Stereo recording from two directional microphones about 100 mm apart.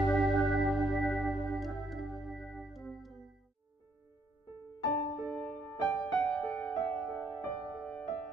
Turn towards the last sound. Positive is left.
turn(degrees=10)  # may be behind; listen again after turning